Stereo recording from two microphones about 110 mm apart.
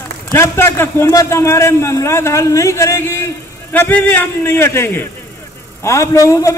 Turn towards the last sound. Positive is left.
turn(degrees=30)  # may be behind; listen again after turning